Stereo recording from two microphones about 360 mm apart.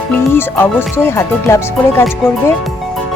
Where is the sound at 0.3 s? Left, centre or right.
Centre.